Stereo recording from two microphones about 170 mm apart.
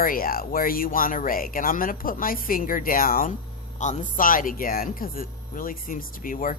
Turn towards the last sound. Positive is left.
turn(degrees=55)  # may be behind; listen again after turning